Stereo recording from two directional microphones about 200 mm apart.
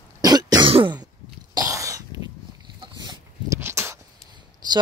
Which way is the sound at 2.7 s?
20° right (ahead or behind).